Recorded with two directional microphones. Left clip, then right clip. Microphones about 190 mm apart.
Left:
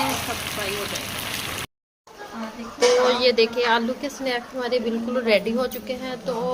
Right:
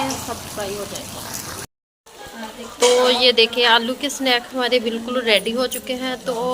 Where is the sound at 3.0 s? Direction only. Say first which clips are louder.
Right 4 dB; centre (ahead or behind).